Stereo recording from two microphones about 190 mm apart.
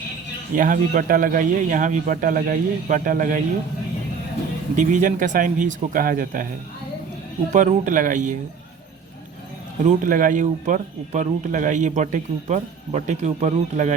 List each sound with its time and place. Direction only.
0.5 s a man's voice: 45° right (ahead or behind)
4.7 s a man's voice: 40° right (ahead or behind)
7.5 s a man's voice: 40° right (ahead or behind)
9.8 s speech: 45° right (ahead or behind)